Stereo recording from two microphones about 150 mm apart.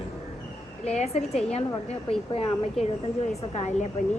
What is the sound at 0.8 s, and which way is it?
A woman's voice, 45° left (ahead or behind).